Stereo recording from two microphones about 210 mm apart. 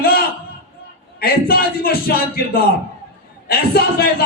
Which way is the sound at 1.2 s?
45° left (ahead or behind).